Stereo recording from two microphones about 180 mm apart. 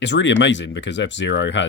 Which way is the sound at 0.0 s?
85° left.